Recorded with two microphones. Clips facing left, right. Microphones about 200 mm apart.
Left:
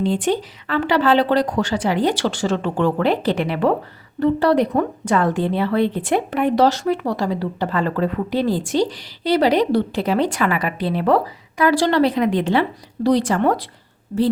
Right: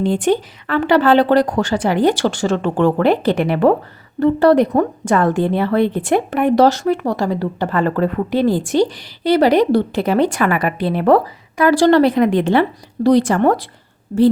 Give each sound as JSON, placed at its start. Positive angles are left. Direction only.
{"t": 0.0, "sound": "a woman's voice", "side_deg": -50}